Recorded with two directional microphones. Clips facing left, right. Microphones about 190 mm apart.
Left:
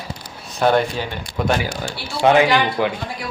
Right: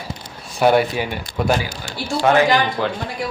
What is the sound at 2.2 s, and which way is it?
Speech, 15° left (ahead or behind).